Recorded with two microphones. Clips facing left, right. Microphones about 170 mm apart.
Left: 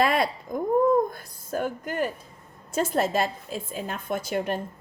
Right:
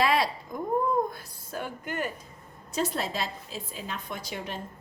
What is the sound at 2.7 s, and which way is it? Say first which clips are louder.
A woman's voice: left 6 dB; 50° left (ahead or behind).